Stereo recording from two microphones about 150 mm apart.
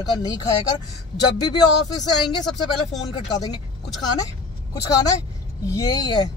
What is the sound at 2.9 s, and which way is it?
Speech, 25° left (ahead or behind).